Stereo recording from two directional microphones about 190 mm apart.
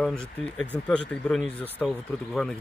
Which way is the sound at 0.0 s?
5° left (ahead or behind).